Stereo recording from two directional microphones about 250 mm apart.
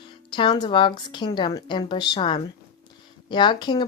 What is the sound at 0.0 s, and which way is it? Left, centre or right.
Speech, centre.